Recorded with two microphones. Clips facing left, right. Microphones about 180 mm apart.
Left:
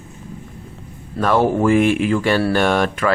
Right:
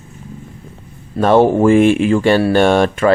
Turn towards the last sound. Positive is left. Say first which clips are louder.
# right 5 dB
turn(degrees=-25)  # may be behind; listen again after turning